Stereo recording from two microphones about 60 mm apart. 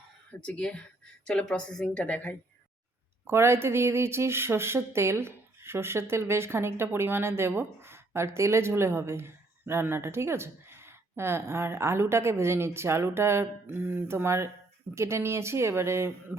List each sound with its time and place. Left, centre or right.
0.4 s a woman's voice: centre
3.2 s a woman's voice: right
13.7 s speech: right